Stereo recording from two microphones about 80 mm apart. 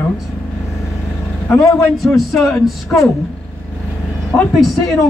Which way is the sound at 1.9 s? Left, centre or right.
Centre.